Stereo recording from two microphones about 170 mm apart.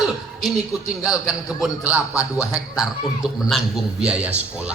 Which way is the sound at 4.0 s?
5° right (ahead or behind).